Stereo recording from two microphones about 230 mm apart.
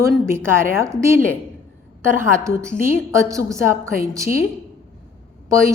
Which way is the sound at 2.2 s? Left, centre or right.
Centre.